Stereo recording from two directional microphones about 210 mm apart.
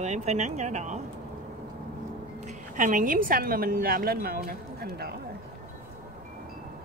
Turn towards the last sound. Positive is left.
turn(degrees=-50)  # may be behind; listen again after turning